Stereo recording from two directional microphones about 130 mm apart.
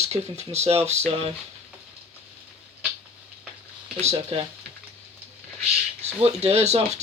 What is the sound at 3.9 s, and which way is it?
Speech, 50° right (ahead or behind).